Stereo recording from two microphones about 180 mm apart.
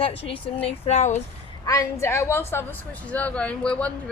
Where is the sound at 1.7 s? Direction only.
15° left (ahead or behind).